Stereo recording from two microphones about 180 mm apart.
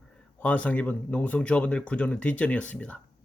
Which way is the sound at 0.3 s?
10° left (ahead or behind).